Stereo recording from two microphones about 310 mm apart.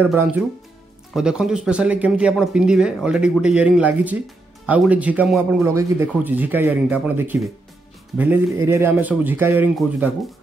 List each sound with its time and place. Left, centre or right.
0.0 s a man's voice: centre